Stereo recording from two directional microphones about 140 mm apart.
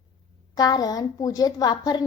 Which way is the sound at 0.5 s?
30° left (ahead or behind).